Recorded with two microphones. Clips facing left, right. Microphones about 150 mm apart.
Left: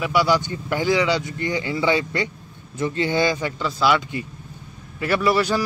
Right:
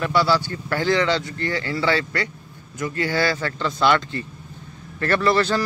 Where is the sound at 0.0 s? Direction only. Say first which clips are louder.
Even; 10° left (ahead or behind).